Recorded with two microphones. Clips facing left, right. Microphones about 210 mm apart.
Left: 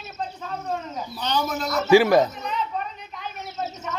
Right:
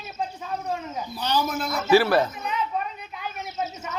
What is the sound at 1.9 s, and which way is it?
Speech, 15° left (ahead or behind).